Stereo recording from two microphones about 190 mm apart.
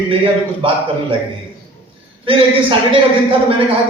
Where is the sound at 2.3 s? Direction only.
30° right (ahead or behind).